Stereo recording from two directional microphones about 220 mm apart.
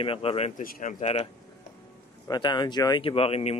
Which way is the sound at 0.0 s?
25° left (ahead or behind).